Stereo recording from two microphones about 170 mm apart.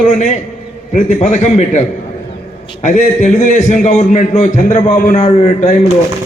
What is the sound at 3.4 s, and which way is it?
A man's voice, 45° left (ahead or behind).